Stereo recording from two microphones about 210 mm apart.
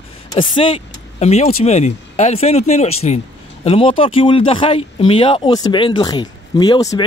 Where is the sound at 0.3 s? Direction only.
25° left (ahead or behind).